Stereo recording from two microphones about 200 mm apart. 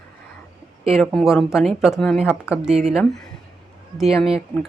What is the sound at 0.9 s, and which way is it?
Speech, centre (ahead or behind).